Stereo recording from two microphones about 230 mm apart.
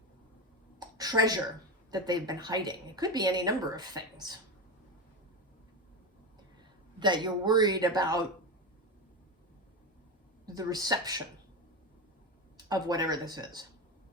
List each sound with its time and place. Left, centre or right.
0.8 s a sound: centre
1.9 s a woman's voice: centre
7.0 s speech: centre
10.4 s speech: centre
12.5 s a woman's voice: centre